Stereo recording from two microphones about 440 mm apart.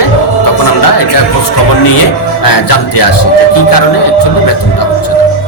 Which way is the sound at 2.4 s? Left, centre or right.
Left.